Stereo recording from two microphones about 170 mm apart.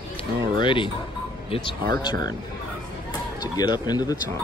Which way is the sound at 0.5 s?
30° left (ahead or behind).